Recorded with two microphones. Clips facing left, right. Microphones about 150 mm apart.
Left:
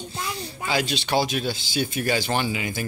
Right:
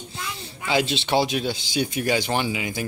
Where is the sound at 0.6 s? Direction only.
25° right (ahead or behind).